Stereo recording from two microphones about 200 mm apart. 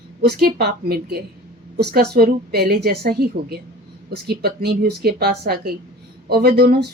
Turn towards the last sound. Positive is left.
turn(degrees=-50)  # may be behind; listen again after turning